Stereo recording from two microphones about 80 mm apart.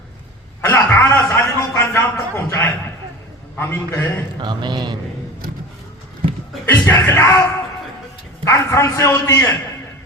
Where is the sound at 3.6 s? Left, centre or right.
Left.